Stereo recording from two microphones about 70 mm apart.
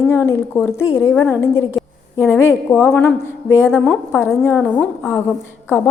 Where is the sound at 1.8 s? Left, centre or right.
Centre.